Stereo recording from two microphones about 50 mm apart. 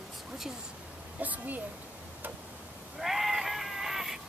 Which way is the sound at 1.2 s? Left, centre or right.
Right.